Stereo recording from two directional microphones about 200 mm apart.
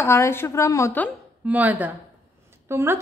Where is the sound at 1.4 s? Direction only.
10° right (ahead or behind).